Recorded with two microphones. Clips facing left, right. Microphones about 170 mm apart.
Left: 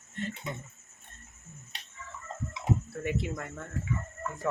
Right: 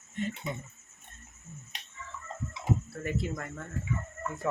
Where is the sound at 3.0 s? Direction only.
Centre (ahead or behind).